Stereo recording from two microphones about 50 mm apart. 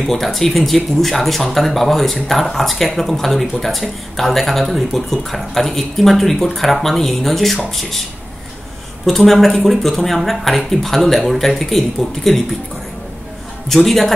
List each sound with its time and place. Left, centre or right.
0.0 s speech: centre
9.0 s speech: centre
13.7 s speech: centre